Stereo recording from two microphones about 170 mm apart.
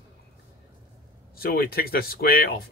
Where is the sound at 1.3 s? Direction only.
60° left (ahead or behind).